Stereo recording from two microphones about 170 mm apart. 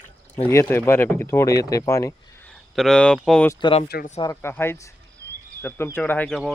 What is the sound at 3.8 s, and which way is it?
Speech, 65° left (ahead or behind).